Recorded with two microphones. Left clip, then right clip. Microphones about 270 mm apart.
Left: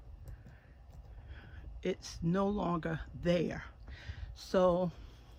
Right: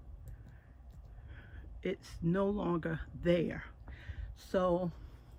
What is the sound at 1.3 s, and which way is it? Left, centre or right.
A man's voice, centre.